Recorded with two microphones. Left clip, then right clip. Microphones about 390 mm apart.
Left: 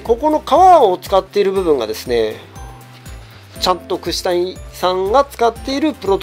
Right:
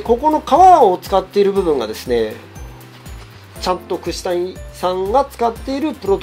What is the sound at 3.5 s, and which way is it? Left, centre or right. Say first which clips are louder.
Speech: left 3 dB; left.